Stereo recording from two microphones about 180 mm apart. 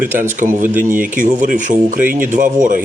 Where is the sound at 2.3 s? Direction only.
45° right (ahead or behind).